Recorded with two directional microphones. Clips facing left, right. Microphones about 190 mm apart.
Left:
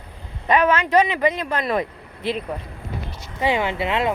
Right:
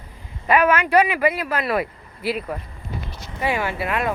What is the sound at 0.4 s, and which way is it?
Speech, 10° right (ahead or behind).